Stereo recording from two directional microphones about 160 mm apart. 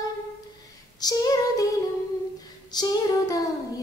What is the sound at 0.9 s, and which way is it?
Child singing, 25° left (ahead or behind).